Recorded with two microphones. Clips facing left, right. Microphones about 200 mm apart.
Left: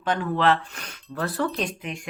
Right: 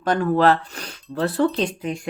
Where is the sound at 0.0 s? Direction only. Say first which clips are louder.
Right 5 dB; 45° right (ahead or behind).